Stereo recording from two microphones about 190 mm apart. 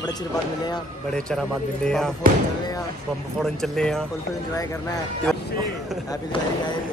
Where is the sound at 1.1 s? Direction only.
5° left (ahead or behind).